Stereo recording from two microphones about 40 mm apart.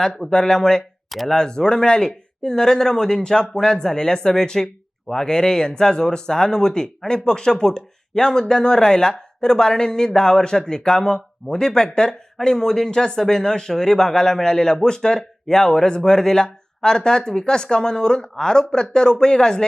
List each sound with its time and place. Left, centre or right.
0.2 s speech: centre